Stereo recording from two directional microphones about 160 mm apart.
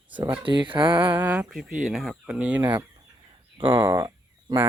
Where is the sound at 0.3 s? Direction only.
30° right (ahead or behind).